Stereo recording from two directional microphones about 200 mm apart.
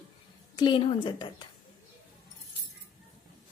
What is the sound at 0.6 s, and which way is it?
Speech, 25° left (ahead or behind).